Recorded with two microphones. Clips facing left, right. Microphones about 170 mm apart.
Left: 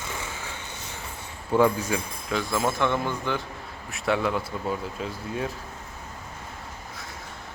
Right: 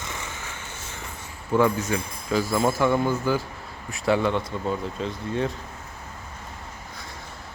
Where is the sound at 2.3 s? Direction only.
Centre (ahead or behind).